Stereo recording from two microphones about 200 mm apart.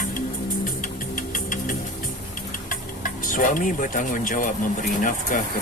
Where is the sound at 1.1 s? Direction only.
40° left (ahead or behind).